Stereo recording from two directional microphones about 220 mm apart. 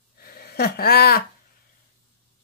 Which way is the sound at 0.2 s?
45° left (ahead or behind).